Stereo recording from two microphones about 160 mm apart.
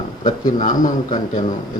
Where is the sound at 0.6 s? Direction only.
60° left (ahead or behind).